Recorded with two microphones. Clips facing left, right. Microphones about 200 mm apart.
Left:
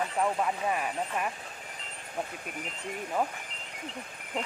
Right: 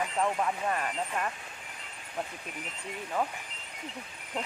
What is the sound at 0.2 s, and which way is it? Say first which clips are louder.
Speech: left 1 dB; 5° left (ahead or behind).